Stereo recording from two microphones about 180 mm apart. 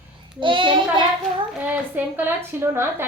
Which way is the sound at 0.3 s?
30° right (ahead or behind).